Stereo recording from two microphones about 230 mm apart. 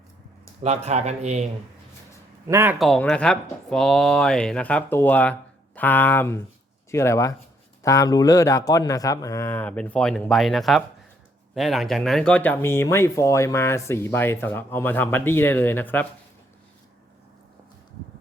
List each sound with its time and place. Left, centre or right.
0.6 s speech: right
2.5 s speech: centre
2.7 s speech: centre